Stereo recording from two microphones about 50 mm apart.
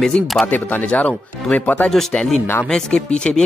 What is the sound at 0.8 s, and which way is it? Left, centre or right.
Speech, left.